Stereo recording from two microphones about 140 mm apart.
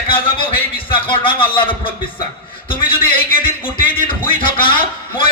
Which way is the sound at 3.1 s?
90° left.